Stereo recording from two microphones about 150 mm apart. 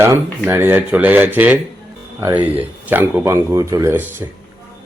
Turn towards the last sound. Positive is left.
turn(degrees=-15)  # may be behind; listen again after turning